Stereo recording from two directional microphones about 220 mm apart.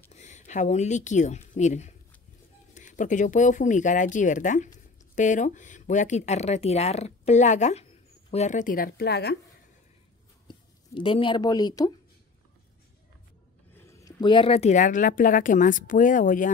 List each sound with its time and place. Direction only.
0.1 s speech: 30° left (ahead or behind); by 9.4 s 45° left (ahead or behind)
10.5 s speech: 25° left (ahead or behind)
13.7 s speech: 15° left (ahead or behind); by 16.4 s 35° left (ahead or behind)